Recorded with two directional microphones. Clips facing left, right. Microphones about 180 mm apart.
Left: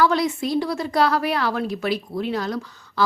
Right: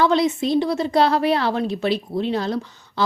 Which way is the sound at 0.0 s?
25° right (ahead or behind).